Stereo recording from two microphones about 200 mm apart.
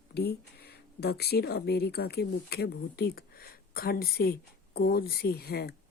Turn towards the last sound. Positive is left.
turn(degrees=50)  # may be behind; listen again after turning